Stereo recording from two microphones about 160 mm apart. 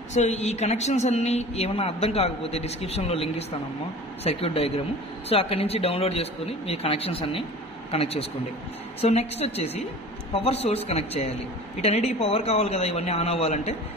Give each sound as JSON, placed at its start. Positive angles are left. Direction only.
{"t": 0.1, "sound": "a woman's voice", "side_deg": 45}